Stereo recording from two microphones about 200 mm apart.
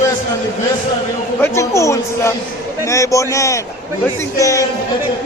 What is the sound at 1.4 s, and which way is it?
Speech, 15° left (ahead or behind).